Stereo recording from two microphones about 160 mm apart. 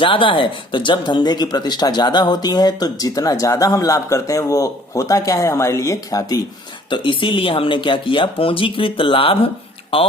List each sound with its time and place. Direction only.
0.0 s speech: 30° left (ahead or behind)